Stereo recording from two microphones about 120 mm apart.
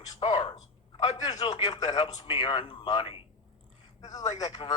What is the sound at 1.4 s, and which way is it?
A man's voice, 35° left (ahead or behind).